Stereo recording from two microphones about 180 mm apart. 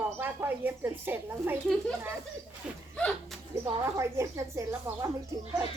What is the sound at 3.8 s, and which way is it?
Speech, 15° right (ahead or behind).